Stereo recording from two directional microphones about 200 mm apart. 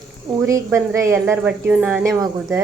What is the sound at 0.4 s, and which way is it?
A woman's voice, 15° right (ahead or behind).